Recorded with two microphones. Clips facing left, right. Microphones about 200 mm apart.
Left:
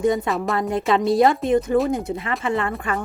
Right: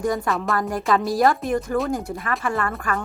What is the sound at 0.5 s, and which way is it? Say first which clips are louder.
Speech: left 2 dB; 25° left (ahead or behind).